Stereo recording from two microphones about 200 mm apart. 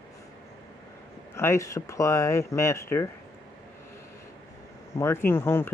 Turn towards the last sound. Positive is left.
turn(degrees=10)  # may be behind; listen again after turning